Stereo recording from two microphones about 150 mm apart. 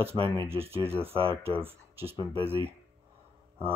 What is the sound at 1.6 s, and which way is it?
Speech, 40° right (ahead or behind).